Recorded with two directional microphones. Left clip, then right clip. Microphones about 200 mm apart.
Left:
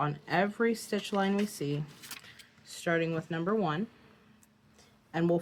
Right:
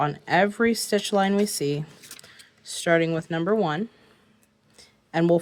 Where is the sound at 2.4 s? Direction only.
45° right (ahead or behind).